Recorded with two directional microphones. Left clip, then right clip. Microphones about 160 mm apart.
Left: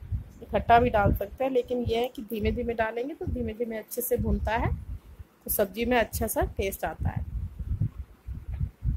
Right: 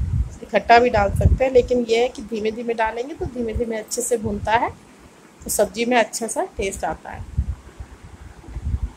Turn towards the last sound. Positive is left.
turn(degrees=20)  # may be behind; listen again after turning